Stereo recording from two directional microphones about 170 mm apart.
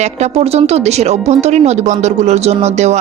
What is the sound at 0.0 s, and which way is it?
Speech, 40° right (ahead or behind).